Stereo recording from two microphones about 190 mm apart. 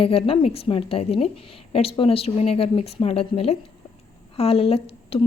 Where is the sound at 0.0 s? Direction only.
30° left (ahead or behind).